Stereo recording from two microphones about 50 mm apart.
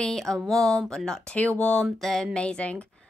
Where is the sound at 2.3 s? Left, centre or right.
Left.